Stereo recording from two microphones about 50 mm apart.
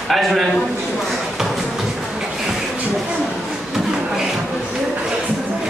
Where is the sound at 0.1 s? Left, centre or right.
Centre.